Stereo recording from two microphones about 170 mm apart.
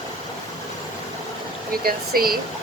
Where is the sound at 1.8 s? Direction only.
60° right (ahead or behind).